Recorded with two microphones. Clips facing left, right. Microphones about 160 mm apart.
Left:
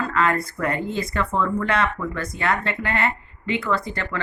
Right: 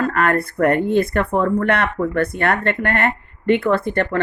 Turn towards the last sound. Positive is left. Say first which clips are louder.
# right 7 dB
turn(degrees=-55)  # may be behind; listen again after turning